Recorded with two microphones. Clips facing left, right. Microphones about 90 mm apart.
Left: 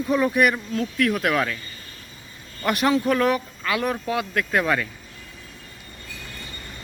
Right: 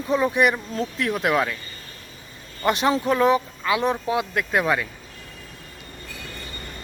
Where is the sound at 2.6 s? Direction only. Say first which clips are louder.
Even; 25° right (ahead or behind).